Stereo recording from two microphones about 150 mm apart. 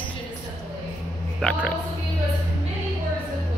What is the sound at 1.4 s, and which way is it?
Speech, 5° left (ahead or behind).